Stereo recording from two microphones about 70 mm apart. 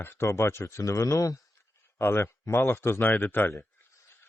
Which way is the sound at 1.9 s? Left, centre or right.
Left.